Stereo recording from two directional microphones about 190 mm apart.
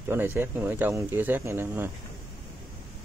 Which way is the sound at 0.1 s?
10° right (ahead or behind).